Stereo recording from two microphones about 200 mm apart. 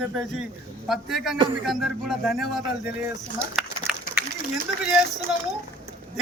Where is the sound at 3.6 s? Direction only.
Centre (ahead or behind).